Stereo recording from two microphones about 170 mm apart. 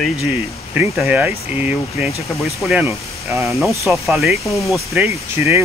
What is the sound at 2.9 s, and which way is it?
Speech, 15° right (ahead or behind).